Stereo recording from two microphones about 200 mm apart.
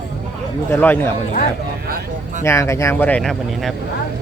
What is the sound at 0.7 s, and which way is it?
Speech, 10° left (ahead or behind).